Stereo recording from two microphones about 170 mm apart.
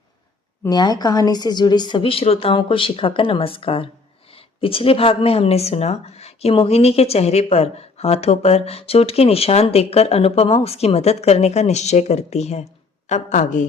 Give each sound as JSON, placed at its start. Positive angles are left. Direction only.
{"t": 0.6, "sound": "a woman's voice", "side_deg": 25}